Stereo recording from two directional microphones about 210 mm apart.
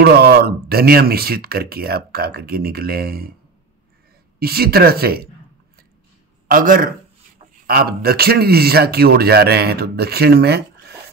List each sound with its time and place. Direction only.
0.0 s speech: 45° right (ahead or behind)
4.4 s speech: 45° right (ahead or behind)
6.4 s a man's voice: 40° right (ahead or behind)